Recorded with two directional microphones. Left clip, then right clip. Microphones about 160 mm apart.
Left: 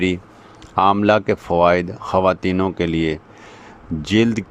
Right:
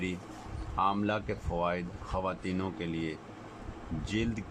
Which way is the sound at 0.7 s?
90° left.